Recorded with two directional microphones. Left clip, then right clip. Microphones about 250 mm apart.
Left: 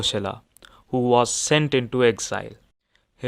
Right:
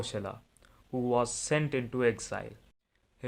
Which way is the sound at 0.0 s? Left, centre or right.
Left.